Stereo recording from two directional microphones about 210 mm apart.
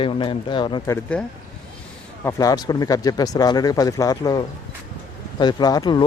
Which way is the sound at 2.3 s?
15° left (ahead or behind).